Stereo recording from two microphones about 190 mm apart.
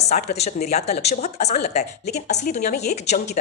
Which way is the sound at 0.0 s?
35° left (ahead or behind).